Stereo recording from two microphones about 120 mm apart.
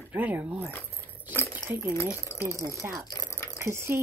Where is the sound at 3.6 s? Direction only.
20° right (ahead or behind).